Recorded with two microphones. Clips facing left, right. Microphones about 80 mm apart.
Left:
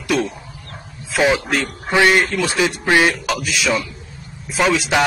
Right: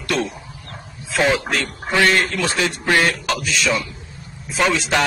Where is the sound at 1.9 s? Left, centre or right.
Centre.